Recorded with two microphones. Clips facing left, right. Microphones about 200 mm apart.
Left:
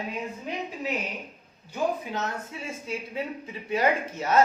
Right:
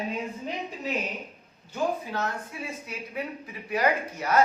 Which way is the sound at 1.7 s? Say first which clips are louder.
Even; 20° left (ahead or behind).